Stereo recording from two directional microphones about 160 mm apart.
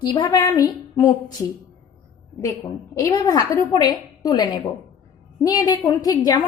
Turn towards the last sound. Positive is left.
turn(degrees=25)  # may be behind; listen again after turning